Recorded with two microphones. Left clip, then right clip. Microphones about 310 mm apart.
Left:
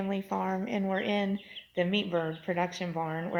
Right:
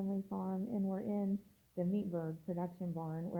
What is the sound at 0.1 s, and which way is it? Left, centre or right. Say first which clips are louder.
A woman's voice: left 11 dB; centre.